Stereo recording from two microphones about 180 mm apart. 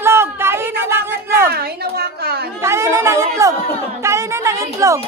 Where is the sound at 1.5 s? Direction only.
60° right (ahead or behind).